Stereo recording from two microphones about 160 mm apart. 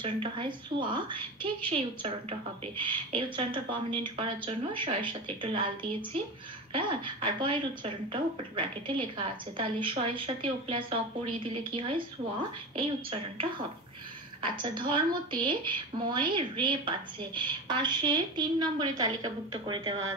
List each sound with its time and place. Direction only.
0.0 s a woman's voice: 30° right (ahead or behind)